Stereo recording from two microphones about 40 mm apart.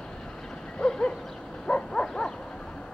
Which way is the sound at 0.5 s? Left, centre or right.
Centre.